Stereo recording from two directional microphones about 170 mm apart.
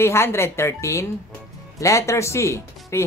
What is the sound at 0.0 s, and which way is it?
Speech, 15° left (ahead or behind).